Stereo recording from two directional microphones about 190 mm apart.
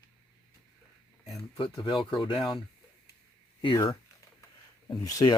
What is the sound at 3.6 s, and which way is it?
Speech, 25° left (ahead or behind).